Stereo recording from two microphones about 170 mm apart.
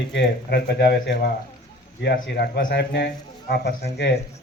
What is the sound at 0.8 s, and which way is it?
Speech, 80° left.